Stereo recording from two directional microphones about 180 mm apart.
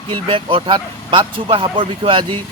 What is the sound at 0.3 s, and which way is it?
Speech, 30° right (ahead or behind).